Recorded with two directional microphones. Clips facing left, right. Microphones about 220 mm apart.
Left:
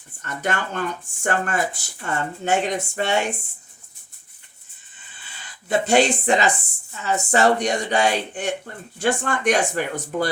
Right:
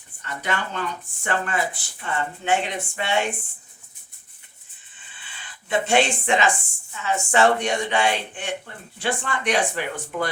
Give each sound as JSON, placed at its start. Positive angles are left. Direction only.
{"t": 0.2, "sound": "speech", "side_deg": 45}
{"t": 5.6, "sound": "speech", "side_deg": 40}